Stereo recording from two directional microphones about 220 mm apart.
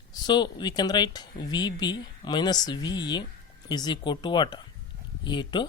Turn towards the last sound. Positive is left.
turn(degrees=20)  # may be behind; listen again after turning